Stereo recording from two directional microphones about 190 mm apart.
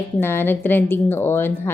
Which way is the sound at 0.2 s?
10° left (ahead or behind).